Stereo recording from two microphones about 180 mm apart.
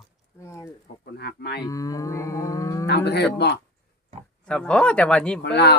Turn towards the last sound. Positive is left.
turn(degrees=65)  # may be behind; listen again after turning